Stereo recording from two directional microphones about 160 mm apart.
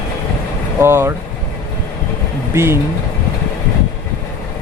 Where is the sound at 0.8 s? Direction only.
15° right (ahead or behind).